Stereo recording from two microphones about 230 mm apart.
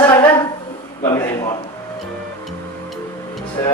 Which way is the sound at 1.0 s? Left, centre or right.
Centre.